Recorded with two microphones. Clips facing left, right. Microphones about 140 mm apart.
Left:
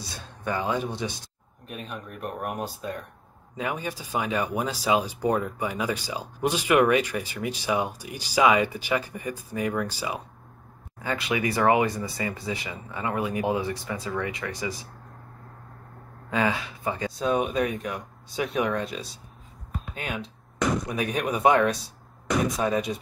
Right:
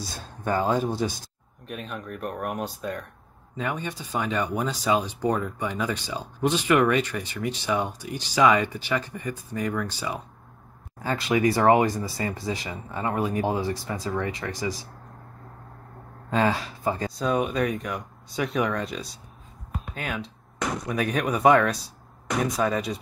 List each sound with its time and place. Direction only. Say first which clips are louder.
0.5 s speech: right 4 dB; 40° right (ahead or behind)
1.7 s speech: right 3 dB; centre (ahead or behind)
11.0 s speech: right 4 dB; 30° right (ahead or behind)
16.3 s speech: right 2 dB; 35° right (ahead or behind)
17.2 s speech: left 1 dB; centre (ahead or behind)